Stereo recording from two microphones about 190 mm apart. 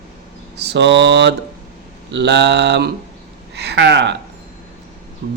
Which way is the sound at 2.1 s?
65° right (ahead or behind).